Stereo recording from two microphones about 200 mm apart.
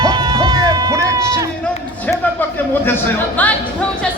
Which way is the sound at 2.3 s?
10° left (ahead or behind).